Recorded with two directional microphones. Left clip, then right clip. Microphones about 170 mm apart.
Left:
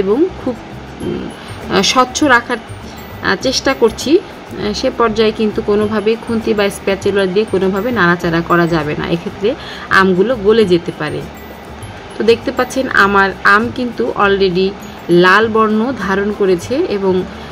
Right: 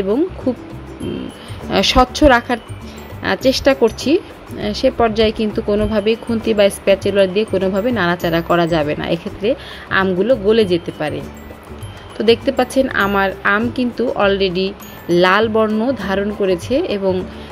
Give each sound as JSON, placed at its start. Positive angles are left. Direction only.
{"t": 1.7, "sound": "speech", "side_deg": -35}
{"t": 12.3, "sound": "speech", "side_deg": -35}